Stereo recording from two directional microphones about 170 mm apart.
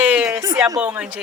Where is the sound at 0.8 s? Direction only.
10° right (ahead or behind).